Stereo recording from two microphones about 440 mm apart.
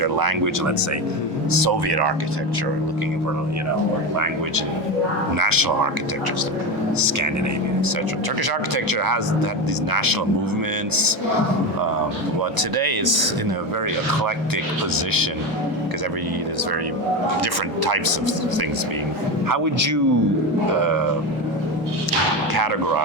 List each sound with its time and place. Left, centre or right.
0.0 s speech: right
1.6 s speech: right
5.4 s speech: right
8.7 s speech: right
12.5 s speech: right
14.9 s speech: right
17.4 s speech: right
19.5 s speech: right
22.5 s speech: right